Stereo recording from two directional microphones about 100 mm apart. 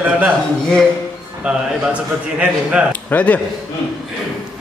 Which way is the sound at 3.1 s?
15° left (ahead or behind).